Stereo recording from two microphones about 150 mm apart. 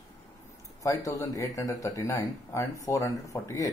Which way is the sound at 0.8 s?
20° left (ahead or behind).